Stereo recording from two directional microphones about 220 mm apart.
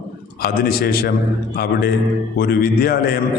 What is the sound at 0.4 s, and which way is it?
Speech, 45° left (ahead or behind).